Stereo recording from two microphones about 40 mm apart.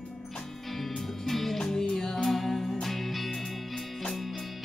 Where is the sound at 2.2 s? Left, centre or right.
Centre.